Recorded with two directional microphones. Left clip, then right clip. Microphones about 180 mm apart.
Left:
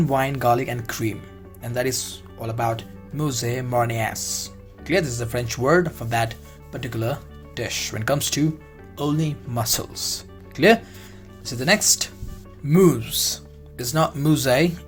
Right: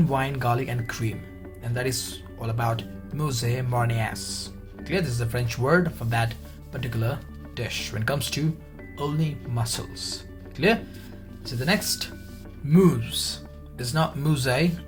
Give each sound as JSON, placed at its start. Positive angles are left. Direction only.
{"t": 0.0, "sound": "speech", "side_deg": 30}
{"t": 12.6, "sound": "speech", "side_deg": 35}